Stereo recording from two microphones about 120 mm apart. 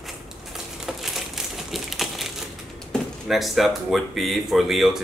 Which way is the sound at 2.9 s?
Centre (ahead or behind).